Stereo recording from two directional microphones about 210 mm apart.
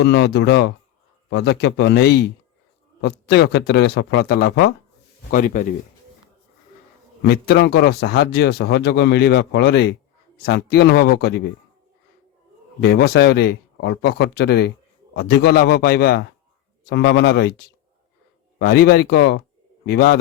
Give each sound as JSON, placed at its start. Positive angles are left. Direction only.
{"t": 0.0, "sound": "speech", "side_deg": 55}
{"t": 5.3, "sound": "speech", "side_deg": 40}
{"t": 7.2, "sound": "speech", "side_deg": 50}
{"t": 12.8, "sound": "speech", "side_deg": 50}
{"t": 18.6, "sound": "a man's voice", "side_deg": 50}